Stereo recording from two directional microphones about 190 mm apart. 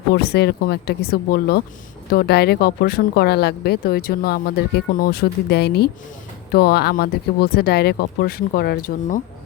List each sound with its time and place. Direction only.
0.1 s speech: 55° left (ahead or behind)